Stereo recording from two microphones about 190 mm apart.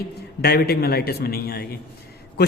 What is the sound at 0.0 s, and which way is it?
A man's voice, 55° left (ahead or behind).